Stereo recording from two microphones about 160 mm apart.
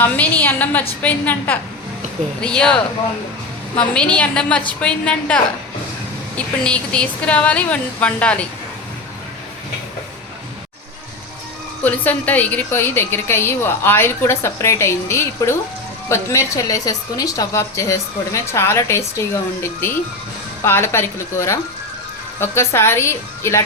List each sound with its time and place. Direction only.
0.0 s a woman's voice: 10° left (ahead or behind)
11.8 s a woman's voice: 10° left (ahead or behind)
20.7 s a woman's voice: 15° left (ahead or behind)